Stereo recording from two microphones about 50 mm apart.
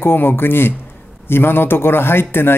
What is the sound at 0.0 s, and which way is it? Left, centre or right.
Speech, left.